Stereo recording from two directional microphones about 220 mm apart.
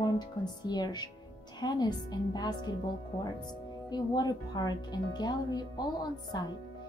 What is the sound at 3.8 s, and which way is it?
A woman's voice, 20° left (ahead or behind).